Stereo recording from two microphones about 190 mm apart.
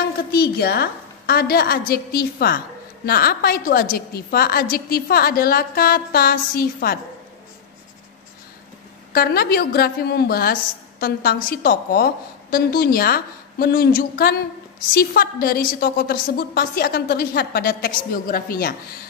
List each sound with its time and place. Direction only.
0.3 s a woman's voice: 55° left (ahead or behind)
9.1 s a woman's voice: 55° left (ahead or behind)